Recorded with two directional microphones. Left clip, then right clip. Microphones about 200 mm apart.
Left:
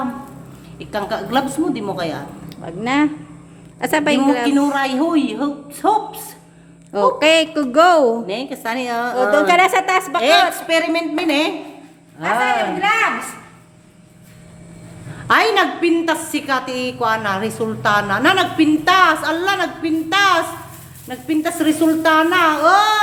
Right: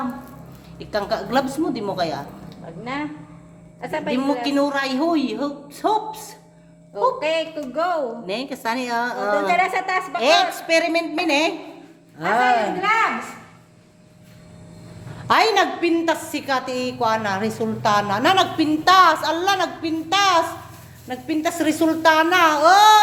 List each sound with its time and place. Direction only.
0.8 s a woman's voice: centre (ahead or behind)
2.8 s a man's voice: 60° left (ahead or behind)
4.4 s a woman's voice: 5° right (ahead or behind)
6.9 s a man's voice: 55° left (ahead or behind)
8.3 s speech: 10° right (ahead or behind)
9.5 s a woman's voice: 45° left (ahead or behind)
10.2 s speech: 10° right (ahead or behind)
15.3 s a woman's voice: 5° right (ahead or behind)